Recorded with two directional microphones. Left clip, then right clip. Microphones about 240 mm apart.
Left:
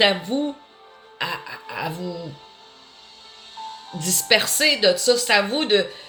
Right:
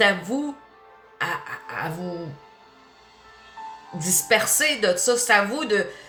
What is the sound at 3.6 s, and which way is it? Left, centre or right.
Music, left.